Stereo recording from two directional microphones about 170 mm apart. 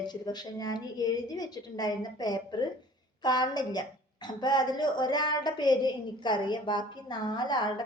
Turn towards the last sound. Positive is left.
turn(degrees=25)  # may be behind; listen again after turning